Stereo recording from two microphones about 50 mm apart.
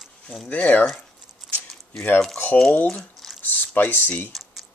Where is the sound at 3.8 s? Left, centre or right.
Left.